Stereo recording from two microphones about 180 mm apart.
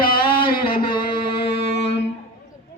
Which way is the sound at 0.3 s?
25° left (ahead or behind).